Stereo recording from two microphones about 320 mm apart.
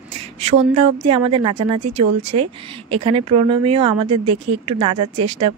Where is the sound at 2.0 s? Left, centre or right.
Right.